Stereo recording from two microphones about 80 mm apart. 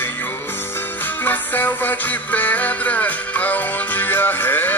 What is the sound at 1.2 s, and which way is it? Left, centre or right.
Music, left.